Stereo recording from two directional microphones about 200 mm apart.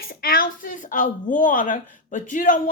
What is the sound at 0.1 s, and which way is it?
A woman's voice, 45° left (ahead or behind).